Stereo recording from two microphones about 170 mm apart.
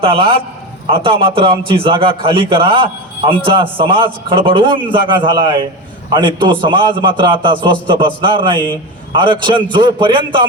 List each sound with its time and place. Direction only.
0.0 s a man's voice: 30° right (ahead or behind)